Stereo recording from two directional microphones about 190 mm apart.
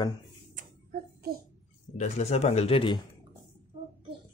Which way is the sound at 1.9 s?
35° left (ahead or behind).